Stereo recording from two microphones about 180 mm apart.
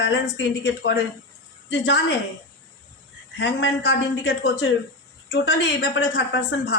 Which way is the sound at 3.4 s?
80° left.